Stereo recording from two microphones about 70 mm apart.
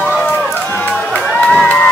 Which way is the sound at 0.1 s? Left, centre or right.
Centre.